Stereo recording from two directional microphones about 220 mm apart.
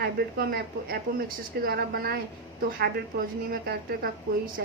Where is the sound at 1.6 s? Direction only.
45° right (ahead or behind).